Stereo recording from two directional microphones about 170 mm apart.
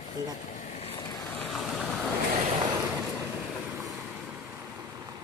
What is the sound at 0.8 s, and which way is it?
Vehicle, 25° left (ahead or behind).